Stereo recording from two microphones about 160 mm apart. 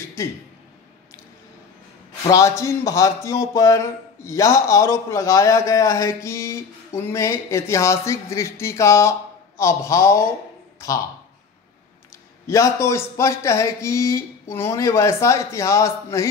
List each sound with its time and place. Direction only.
2.2 s a man's voice: 20° left (ahead or behind)
12.4 s a man's voice: 20° left (ahead or behind)